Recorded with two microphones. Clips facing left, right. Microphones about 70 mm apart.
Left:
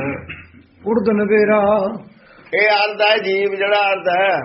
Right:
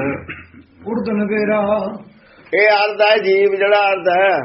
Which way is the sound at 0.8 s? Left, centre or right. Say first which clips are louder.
Left 4 dB; left.